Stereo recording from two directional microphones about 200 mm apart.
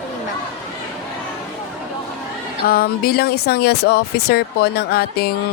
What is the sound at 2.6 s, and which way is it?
Speech, 50° left (ahead or behind).